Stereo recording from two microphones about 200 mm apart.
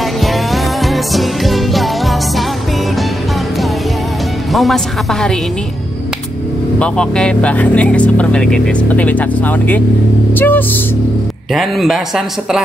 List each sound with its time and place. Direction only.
0.8 s music: centre (ahead or behind)
4.5 s music: centre (ahead or behind)
6.8 s speech: 5° left (ahead or behind)